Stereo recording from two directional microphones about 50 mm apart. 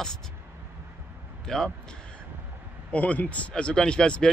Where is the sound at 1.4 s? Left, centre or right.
Centre.